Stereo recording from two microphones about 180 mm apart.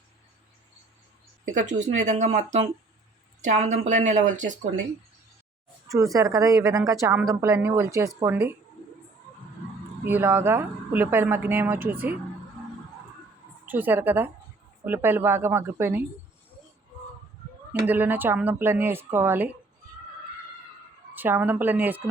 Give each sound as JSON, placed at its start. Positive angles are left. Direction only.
{"t": 1.5, "sound": "speech", "side_deg": -40}
{"t": 6.1, "sound": "speech", "side_deg": -20}
{"t": 10.0, "sound": "speech", "side_deg": -10}
{"t": 13.7, "sound": "speech", "side_deg": -10}
{"t": 17.7, "sound": "speech", "side_deg": -10}
{"t": 21.1, "sound": "speech", "side_deg": -10}